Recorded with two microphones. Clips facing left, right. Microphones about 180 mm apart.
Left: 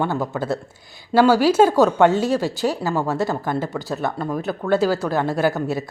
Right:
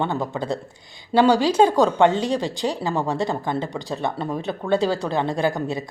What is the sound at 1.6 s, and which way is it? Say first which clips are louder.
A woman's voice: left 2 dB; 5° left (ahead or behind).